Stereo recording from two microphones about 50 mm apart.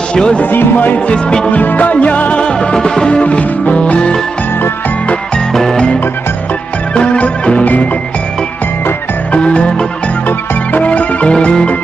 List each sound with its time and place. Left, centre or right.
0.1 s speech: centre
0.5 s speech: left
0.9 s music: left
1.5 s music: left
5.5 s music: centre
6.9 s music: left
7.6 s music: left
9.3 s music: left
10.2 s music: left